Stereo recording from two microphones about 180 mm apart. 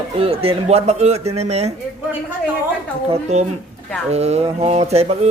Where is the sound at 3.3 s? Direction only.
35° right (ahead or behind).